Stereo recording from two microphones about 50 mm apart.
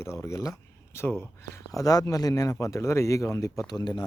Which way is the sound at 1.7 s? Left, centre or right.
Left.